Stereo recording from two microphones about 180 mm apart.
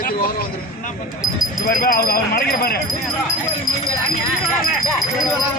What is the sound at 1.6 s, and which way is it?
Speech, 50° left (ahead or behind).